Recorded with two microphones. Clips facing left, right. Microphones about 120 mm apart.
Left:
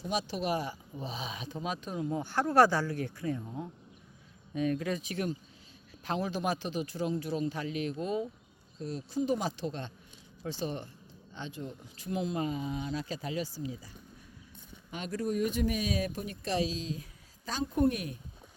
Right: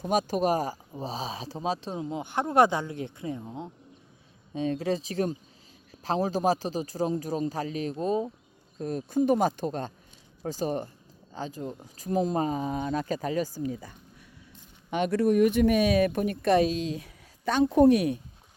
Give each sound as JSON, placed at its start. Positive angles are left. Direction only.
{"t": 0.0, "sound": "a man's voice", "side_deg": -45}
{"t": 8.8, "sound": "speech", "side_deg": -50}
{"t": 14.8, "sound": "speech", "side_deg": -70}